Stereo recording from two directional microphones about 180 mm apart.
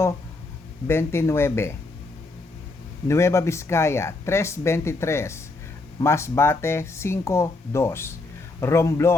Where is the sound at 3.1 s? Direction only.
15° left (ahead or behind).